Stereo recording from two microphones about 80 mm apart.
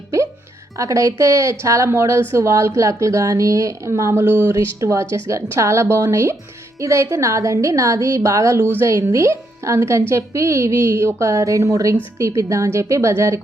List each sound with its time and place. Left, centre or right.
0.8 s a woman's voice: right
4.2 s speech: right
4.6 s a woman's voice: right